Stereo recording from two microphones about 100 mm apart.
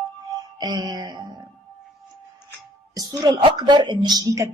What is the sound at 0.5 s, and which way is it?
Speech, 40° right (ahead or behind).